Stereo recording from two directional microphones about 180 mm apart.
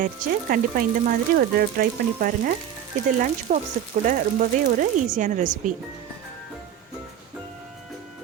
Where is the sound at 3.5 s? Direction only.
40° right (ahead or behind).